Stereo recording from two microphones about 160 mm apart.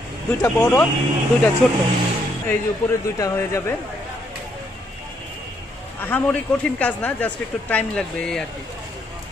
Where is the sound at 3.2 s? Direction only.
20° left (ahead or behind).